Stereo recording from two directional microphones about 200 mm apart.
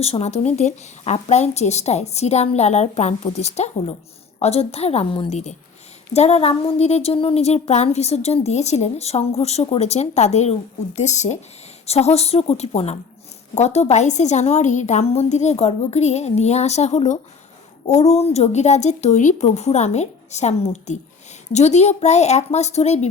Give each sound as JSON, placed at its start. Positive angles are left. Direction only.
{"t": 0.0, "sound": "a woman's voice", "side_deg": 30}